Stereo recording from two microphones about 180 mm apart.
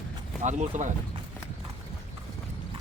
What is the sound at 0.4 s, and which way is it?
Speech, 40° right (ahead or behind).